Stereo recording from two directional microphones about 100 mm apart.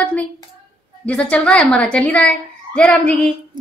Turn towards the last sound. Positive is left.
turn(degrees=10)  # may be behind; listen again after turning